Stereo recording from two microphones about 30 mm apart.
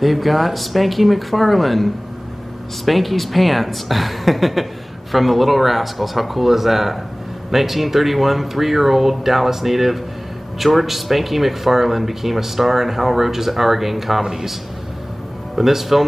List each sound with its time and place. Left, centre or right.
0.0 s speech: centre
14.2 s speech: centre
15.5 s speech: centre